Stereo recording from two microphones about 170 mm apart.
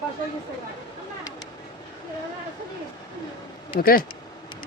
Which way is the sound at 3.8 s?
60° left (ahead or behind).